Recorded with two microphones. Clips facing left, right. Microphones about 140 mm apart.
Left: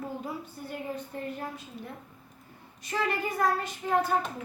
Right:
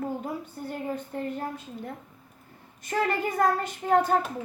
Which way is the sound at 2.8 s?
50° right (ahead or behind).